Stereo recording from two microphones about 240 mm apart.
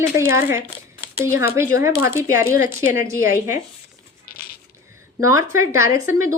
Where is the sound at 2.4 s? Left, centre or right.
Left.